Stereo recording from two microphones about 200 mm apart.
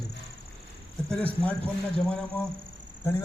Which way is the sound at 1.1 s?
5° left (ahead or behind).